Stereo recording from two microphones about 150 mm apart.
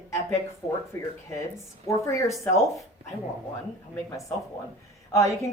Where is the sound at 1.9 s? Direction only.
20° left (ahead or behind).